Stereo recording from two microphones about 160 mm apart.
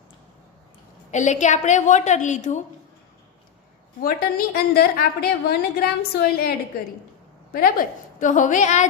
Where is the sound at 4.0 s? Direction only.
65° left (ahead or behind).